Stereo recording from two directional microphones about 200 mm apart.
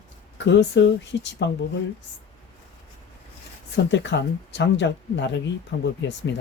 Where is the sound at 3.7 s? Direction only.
65° left (ahead or behind).